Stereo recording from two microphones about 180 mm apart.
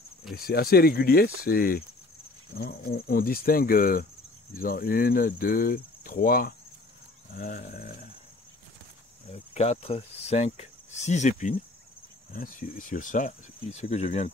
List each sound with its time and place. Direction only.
0.3 s speech: 55° left (ahead or behind)
9.3 s speech: 35° left (ahead or behind)